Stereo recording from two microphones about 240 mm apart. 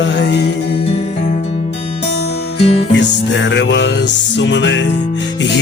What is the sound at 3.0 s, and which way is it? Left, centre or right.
Music, left.